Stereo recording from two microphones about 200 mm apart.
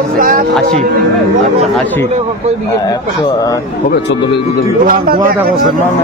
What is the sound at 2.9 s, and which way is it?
Speech, 20° left (ahead or behind).